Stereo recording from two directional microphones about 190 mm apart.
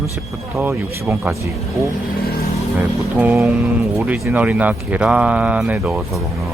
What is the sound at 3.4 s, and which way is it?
Speech, centre (ahead or behind).